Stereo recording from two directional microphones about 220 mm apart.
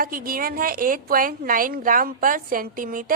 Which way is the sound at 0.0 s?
40° right (ahead or behind).